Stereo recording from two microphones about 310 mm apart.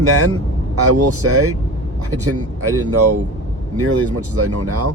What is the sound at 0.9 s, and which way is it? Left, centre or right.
Speech, right.